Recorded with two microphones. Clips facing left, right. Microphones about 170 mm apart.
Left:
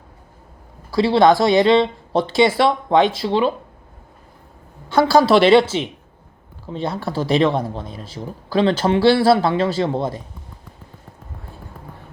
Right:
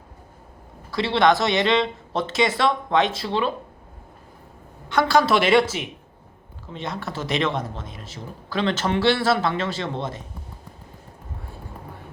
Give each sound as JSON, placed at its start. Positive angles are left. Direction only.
{"t": 0.9, "sound": "a man's voice", "side_deg": 35}
{"t": 4.9, "sound": "a man's voice", "side_deg": 30}